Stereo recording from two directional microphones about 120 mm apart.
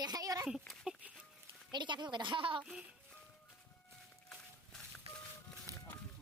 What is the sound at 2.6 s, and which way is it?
Speech, 10° right (ahead or behind).